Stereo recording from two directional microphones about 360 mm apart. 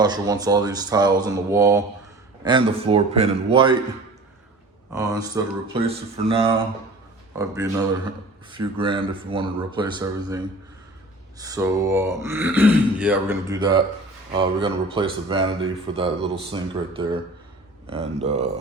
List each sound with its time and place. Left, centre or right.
0.0 s speech: centre
4.9 s speech: centre